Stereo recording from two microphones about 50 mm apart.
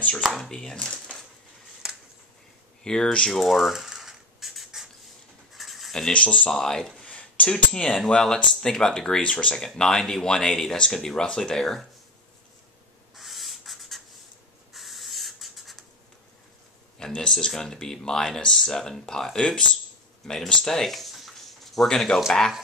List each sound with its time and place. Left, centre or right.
0.4 s speech: centre
2.8 s speech: centre
3.3 s a sound: centre
6.1 s speech: left
6.5 s speech: centre
7.1 s a sound: left
7.5 s speech: centre
13.1 s owl: centre
14.7 s a sound: centre
17.0 s speech: centre
20.2 s a sound: centre
21.8 s speech: centre